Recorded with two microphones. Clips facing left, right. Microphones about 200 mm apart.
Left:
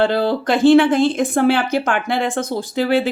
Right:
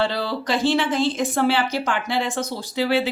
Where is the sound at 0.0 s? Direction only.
50° left (ahead or behind).